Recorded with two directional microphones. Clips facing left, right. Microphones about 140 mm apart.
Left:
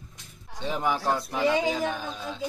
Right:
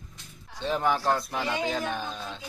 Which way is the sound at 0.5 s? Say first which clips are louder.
Right 1 dB; 10° left (ahead or behind).